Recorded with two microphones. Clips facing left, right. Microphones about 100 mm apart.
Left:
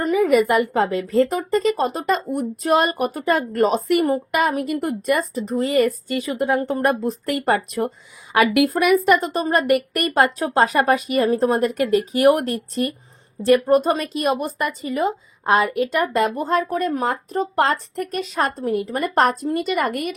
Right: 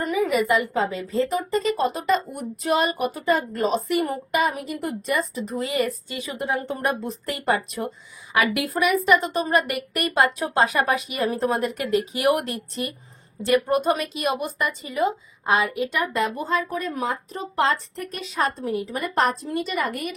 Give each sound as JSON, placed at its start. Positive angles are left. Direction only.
{"t": 0.1, "sound": "a woman's voice", "side_deg": 50}
{"t": 1.3, "sound": "a woman's voice", "side_deg": 40}
{"t": 9.2, "sound": "a woman's voice", "side_deg": 40}